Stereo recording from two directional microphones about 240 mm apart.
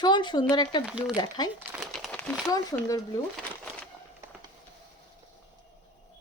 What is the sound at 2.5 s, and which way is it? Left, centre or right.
Speech, centre.